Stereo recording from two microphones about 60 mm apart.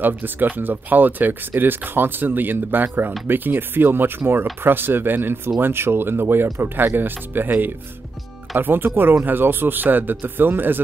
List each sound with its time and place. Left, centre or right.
0.0 s speech: right